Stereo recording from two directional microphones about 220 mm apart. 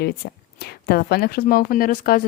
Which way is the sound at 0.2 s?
45° left (ahead or behind).